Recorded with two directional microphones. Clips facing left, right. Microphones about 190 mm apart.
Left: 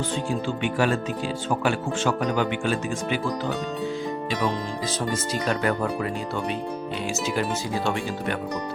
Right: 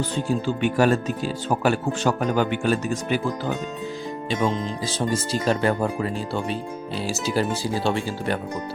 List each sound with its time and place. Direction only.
0.3 s speech: 40° right (ahead or behind)
4.3 s speech: 30° right (ahead or behind)